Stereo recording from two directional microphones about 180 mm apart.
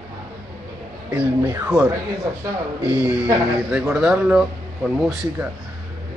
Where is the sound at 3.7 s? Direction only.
5° right (ahead or behind).